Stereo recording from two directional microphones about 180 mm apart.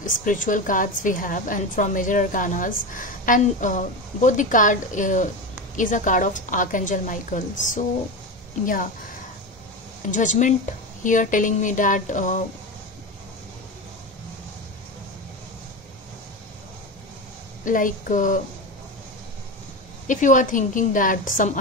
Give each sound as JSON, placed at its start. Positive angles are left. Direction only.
{"t": 0.0, "sound": "a woman's voice", "side_deg": 45}
{"t": 10.1, "sound": "a woman's voice", "side_deg": 45}
{"t": 17.6, "sound": "a woman's voice", "side_deg": 45}
{"t": 20.1, "sound": "a woman's voice", "side_deg": 45}